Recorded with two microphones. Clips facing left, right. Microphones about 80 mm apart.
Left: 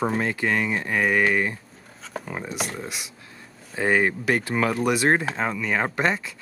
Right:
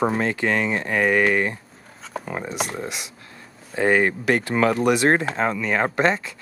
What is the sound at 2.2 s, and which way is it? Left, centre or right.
Speech, right.